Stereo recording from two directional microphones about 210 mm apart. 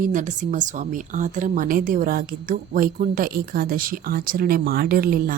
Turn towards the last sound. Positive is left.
turn(degrees=-45)  # may be behind; listen again after turning